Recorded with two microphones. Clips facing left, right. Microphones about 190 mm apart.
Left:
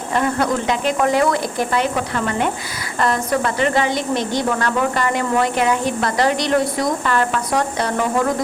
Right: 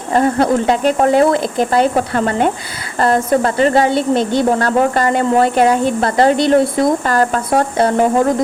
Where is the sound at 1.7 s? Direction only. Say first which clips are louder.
Right 7 dB; 40° right (ahead or behind).